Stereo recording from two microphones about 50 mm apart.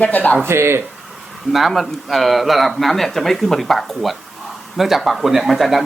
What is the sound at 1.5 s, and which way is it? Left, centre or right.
Speech, centre.